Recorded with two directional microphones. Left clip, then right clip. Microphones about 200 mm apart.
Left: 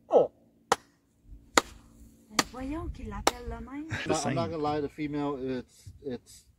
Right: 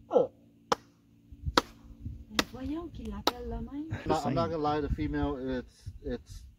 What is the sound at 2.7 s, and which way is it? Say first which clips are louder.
Chop: left 1 dB; 20° left (ahead or behind).